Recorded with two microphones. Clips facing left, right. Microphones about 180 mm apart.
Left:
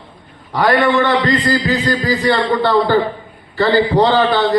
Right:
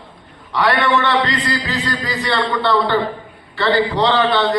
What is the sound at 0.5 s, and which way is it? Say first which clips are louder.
Speech: left 3 dB; 40° left (ahead or behind).